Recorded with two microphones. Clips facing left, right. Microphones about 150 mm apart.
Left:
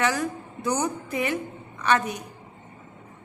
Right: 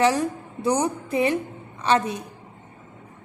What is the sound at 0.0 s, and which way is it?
A woman's voice, 30° right (ahead or behind).